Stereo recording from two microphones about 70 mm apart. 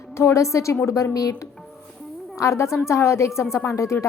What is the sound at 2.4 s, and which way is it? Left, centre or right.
A woman's voice, left.